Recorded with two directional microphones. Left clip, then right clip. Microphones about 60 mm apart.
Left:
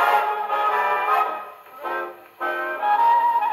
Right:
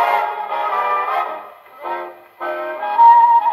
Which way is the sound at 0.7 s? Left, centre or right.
Centre.